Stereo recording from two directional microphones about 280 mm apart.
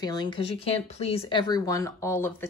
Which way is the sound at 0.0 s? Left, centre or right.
Centre.